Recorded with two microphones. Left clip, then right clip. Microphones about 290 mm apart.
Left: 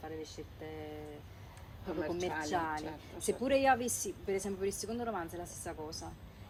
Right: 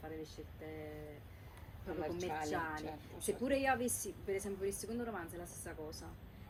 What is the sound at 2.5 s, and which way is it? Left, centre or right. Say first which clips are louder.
A woman's voice: left 5 dB; centre.